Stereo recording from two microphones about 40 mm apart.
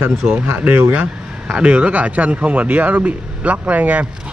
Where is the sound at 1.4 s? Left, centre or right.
Right.